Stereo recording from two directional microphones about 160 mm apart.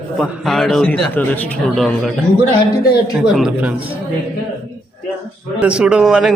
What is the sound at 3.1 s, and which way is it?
Speech, centre (ahead or behind).